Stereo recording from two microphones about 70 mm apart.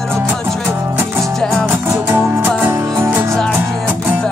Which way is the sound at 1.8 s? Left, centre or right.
Right.